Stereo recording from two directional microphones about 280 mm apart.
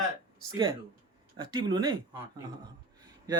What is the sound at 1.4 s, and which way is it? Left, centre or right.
Speech, centre.